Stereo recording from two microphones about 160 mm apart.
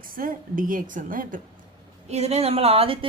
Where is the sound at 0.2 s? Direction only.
60° right (ahead or behind).